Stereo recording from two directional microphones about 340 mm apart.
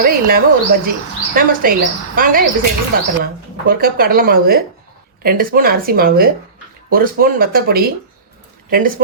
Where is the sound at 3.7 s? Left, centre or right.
Right.